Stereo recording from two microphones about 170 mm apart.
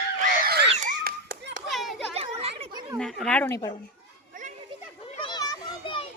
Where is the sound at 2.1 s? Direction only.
35° right (ahead or behind).